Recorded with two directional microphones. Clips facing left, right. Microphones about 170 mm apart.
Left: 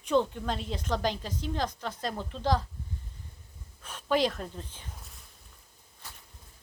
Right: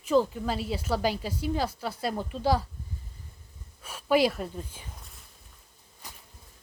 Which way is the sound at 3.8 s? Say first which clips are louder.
Right 4 dB; 10° right (ahead or behind).